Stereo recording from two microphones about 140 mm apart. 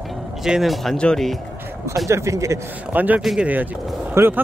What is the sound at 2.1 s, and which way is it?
A man's voice, 20° right (ahead or behind).